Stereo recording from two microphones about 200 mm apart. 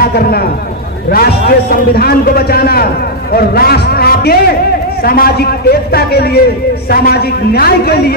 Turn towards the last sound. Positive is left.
turn(degrees=50)  # may be behind; listen again after turning